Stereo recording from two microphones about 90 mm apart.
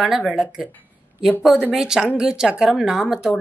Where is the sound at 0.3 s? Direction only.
5° right (ahead or behind).